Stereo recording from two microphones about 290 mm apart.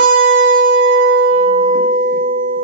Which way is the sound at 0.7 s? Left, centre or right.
Right.